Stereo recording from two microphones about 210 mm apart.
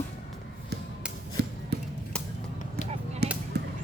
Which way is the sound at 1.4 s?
50° right (ahead or behind).